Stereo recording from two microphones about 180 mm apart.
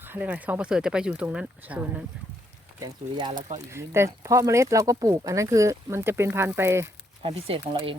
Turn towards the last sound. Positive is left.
turn(degrees=-35)  # may be behind; listen again after turning